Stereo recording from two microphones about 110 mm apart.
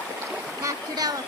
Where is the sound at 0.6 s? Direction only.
35° right (ahead or behind).